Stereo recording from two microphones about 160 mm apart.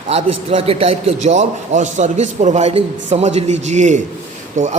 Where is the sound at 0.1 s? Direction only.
40° right (ahead or behind).